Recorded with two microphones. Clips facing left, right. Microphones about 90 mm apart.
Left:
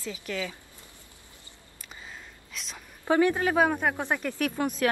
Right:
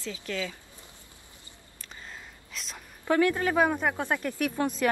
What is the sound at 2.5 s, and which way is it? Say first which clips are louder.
Speech: even; centre (ahead or behind).